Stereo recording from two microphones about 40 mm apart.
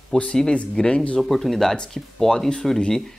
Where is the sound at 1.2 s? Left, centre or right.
Centre.